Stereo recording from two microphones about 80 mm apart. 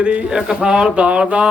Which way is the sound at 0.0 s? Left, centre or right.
Centre.